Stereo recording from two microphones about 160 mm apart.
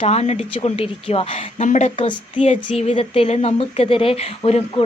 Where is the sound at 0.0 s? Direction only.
40° left (ahead or behind).